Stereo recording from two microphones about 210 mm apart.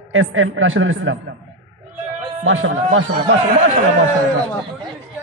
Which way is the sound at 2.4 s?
65° right (ahead or behind).